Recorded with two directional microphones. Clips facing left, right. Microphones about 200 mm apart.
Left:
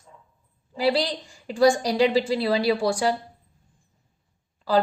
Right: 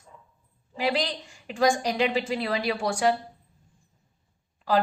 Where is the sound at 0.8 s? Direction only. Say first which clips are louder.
Left 4 dB; 35° left (ahead or behind).